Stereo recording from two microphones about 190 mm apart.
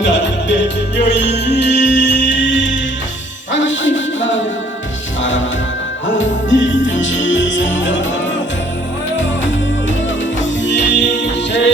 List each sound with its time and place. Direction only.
0.0 s music: 70° left (ahead or behind)
6.1 s music: 75° left (ahead or behind)
10.6 s music: 65° left (ahead or behind)